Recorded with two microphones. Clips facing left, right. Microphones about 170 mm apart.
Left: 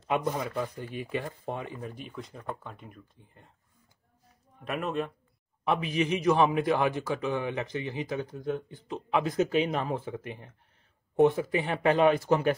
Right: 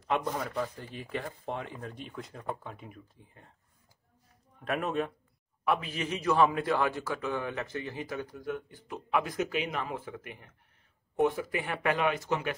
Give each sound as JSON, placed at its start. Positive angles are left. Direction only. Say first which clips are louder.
{"t": 0.1, "sound": "speech", "louder": "left 2 dB", "side_deg": 15}
{"t": 4.6, "sound": "speech", "louder": "even", "side_deg": 0}
{"t": 5.6, "sound": "a man's voice", "louder": "left 3 dB", "side_deg": 20}